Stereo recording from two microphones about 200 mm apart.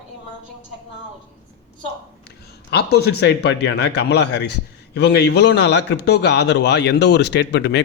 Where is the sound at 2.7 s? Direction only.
55° left (ahead or behind).